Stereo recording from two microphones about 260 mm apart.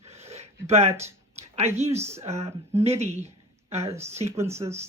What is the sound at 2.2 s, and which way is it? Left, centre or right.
Speech, right.